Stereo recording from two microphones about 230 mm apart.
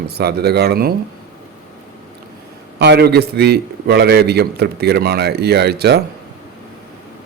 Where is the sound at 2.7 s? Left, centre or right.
Right.